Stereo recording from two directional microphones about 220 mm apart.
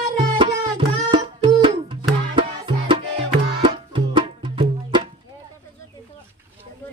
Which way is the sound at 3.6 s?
20° right (ahead or behind).